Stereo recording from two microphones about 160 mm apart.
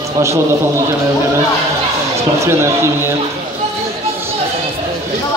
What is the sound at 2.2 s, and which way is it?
Speech, 15° right (ahead or behind).